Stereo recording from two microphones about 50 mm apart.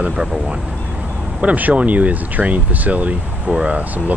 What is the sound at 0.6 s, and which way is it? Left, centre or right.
Vehicle, centre.